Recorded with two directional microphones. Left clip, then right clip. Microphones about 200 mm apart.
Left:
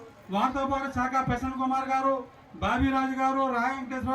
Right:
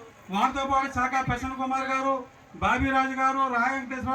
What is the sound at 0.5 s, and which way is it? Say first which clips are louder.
Speech: right 3 dB; 35° right (ahead or behind).